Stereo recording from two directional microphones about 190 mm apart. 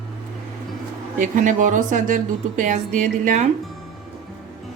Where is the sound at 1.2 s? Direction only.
45° right (ahead or behind).